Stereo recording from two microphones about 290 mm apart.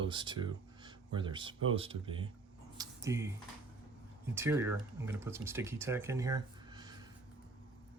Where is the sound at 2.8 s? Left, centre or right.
Centre.